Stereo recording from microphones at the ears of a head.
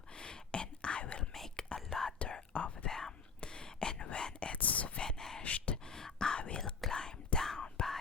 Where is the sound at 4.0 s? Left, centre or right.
Left.